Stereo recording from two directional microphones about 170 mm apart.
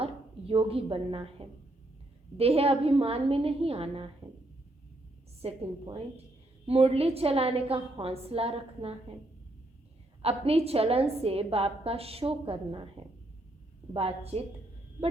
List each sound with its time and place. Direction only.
0.0 s a woman's voice: 35° right (ahead or behind)
5.4 s a woman's voice: 35° right (ahead or behind)
10.2 s a woman's voice: 35° right (ahead or behind)